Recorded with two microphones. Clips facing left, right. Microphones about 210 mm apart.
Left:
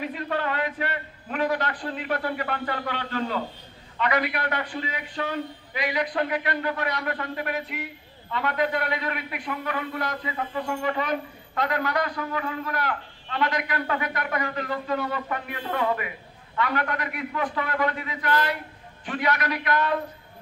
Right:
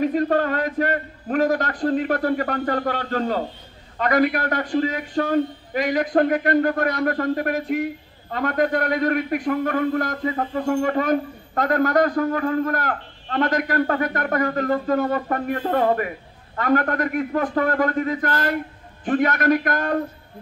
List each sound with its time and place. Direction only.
0.0 s a man's voice: 45° right (ahead or behind)